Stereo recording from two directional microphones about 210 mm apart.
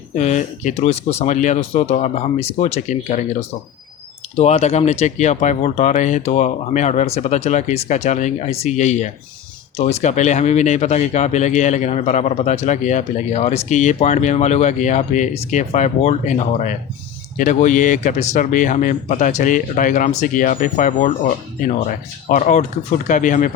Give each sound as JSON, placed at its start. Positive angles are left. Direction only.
{"t": 0.2, "sound": "speech", "side_deg": 35}
{"t": 4.4, "sound": "speech", "side_deg": 30}